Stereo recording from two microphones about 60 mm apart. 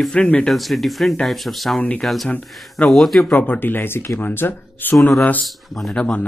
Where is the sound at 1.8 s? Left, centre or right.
Left.